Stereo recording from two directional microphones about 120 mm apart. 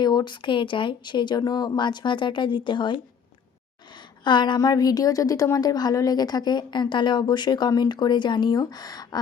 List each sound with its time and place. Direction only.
0.0 s a woman's voice: 35° left (ahead or behind)
4.2 s a woman's voice: 40° left (ahead or behind)